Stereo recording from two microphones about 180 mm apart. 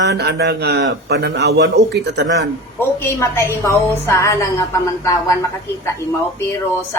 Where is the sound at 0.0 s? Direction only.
70° right (ahead or behind).